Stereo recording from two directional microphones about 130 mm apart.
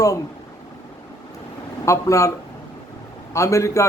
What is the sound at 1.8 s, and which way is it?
Speech, 25° left (ahead or behind).